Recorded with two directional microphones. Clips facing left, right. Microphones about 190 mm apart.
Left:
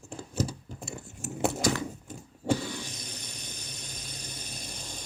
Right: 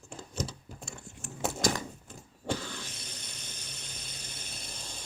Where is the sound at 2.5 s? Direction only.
15° left (ahead or behind).